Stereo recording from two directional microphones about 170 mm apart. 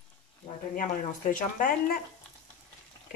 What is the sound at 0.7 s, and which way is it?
Speech, 50° left (ahead or behind).